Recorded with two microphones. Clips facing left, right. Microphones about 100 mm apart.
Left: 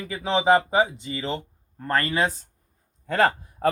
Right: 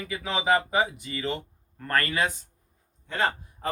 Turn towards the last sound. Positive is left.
turn(degrees=45)  # may be behind; listen again after turning